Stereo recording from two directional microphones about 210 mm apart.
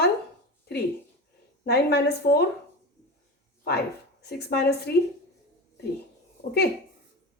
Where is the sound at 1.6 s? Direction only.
50° left (ahead or behind).